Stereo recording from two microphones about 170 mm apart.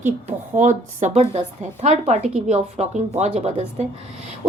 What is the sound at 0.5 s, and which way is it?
A woman's voice, 50° right (ahead or behind).